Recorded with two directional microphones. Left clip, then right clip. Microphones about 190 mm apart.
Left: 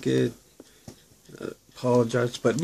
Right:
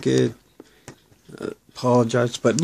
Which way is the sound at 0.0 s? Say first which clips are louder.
Right 5 dB; 45° right (ahead or behind).